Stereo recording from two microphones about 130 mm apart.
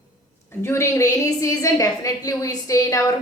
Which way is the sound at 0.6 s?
20° left (ahead or behind).